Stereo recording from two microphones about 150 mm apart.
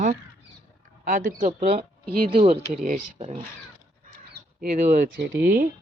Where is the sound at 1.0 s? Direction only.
65° right (ahead or behind).